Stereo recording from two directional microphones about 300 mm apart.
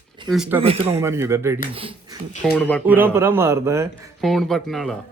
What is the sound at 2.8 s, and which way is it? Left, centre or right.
A man's voice, centre.